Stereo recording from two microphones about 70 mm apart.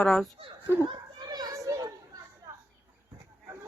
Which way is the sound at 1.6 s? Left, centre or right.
Right.